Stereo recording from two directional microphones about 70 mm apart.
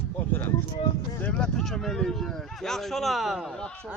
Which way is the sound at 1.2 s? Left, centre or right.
Centre.